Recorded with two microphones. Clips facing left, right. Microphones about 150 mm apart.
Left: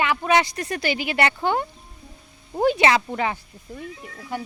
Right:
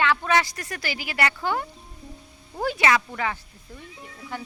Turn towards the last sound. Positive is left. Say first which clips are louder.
# left 4 dB
turn(degrees=15)  # may be behind; listen again after turning